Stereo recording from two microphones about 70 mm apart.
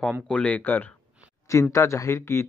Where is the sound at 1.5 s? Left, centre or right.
Left.